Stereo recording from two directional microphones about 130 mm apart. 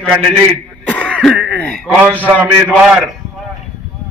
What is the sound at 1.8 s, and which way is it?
Speech, 10° right (ahead or behind).